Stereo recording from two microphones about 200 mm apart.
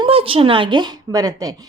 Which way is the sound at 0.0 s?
25° right (ahead or behind).